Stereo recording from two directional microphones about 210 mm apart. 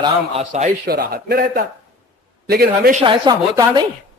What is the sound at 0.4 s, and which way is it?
Speech, 35° right (ahead or behind).